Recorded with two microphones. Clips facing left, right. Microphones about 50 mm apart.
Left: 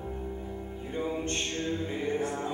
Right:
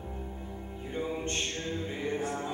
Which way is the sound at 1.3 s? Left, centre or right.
Centre.